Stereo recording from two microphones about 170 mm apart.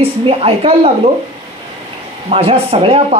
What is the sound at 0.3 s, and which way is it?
Speech, 35° right (ahead or behind).